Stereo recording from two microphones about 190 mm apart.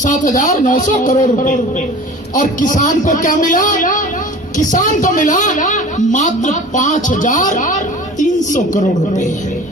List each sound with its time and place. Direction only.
0.0 s a man's voice: 40° left (ahead or behind)